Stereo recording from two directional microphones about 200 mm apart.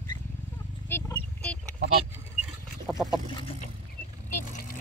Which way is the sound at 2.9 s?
Centre (ahead or behind).